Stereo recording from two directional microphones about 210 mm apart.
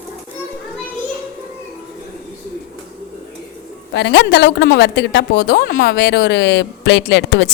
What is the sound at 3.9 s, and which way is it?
A woman's voice, 55° left (ahead or behind).